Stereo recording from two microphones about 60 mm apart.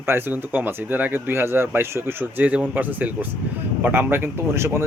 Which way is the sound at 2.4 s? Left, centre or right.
Right.